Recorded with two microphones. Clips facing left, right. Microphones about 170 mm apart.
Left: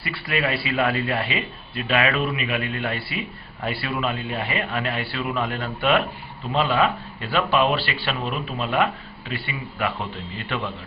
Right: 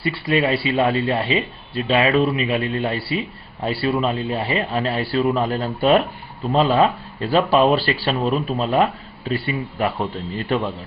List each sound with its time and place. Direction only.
0.0 s speech: 30° right (ahead or behind)